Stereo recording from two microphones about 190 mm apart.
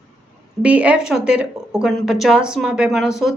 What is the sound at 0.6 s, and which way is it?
Speech, 5° right (ahead or behind).